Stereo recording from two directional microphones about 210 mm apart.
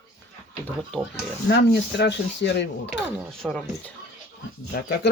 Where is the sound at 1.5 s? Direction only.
55° left (ahead or behind).